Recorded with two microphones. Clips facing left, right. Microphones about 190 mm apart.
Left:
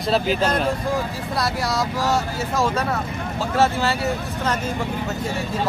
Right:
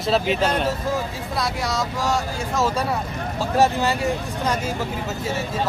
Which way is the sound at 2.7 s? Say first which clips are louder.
Even; 10° right (ahead or behind).